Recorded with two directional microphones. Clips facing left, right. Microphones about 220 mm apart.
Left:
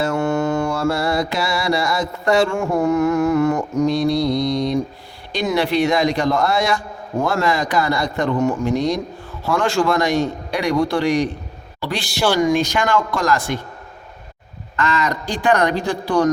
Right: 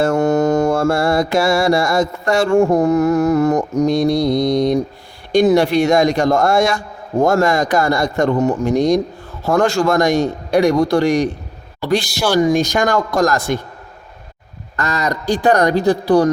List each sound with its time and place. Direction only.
0.0 s mantra: 45° right (ahead or behind)
5.3 s a man's voice: 45° right (ahead or behind)
14.8 s speech: 40° right (ahead or behind)